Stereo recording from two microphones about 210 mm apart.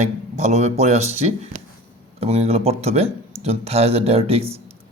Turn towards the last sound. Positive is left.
turn(degrees=-30)  # may be behind; listen again after turning